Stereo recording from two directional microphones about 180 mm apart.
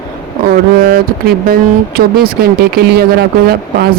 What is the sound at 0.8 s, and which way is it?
Speech, 55° right (ahead or behind).